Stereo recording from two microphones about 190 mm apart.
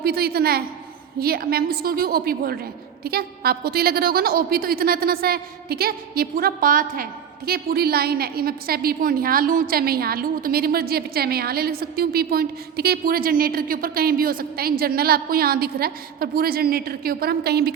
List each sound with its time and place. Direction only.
0.0 s a woman's voice: 55° right (ahead or behind)